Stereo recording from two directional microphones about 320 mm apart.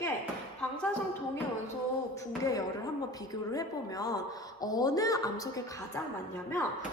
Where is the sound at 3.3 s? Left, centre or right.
Centre.